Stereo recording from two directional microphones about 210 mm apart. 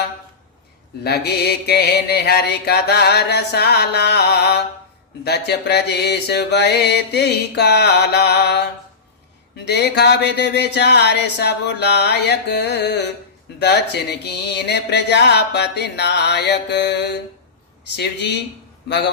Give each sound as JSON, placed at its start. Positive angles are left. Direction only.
{"t": 1.0, "sound": "mantra", "side_deg": 50}
{"t": 9.6, "sound": "mantra", "side_deg": 50}
{"t": 17.9, "sound": "speech", "side_deg": 55}
{"t": 18.9, "sound": "mantra", "side_deg": 55}